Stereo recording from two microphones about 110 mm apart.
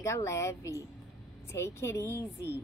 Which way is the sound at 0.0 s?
25° left (ahead or behind).